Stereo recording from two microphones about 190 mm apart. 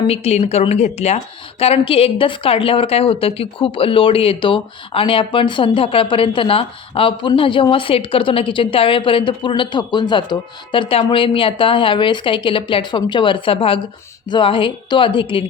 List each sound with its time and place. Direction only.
0.1 s a woman's voice: 35° left (ahead or behind)